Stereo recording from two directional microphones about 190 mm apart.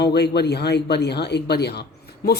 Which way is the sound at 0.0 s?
60° left (ahead or behind).